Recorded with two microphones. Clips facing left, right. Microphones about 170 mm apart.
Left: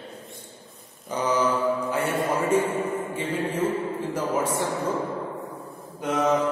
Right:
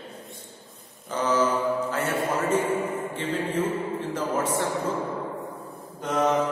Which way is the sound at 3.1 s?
10° left (ahead or behind).